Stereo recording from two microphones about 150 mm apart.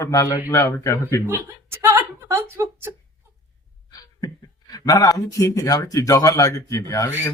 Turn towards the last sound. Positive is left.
turn(degrees=20)  # may be behind; listen again after turning